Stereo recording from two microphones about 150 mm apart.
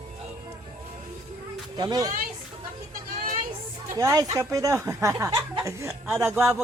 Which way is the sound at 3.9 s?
25° right (ahead or behind).